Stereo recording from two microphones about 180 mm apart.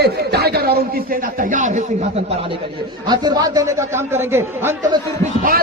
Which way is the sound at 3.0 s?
25° right (ahead or behind).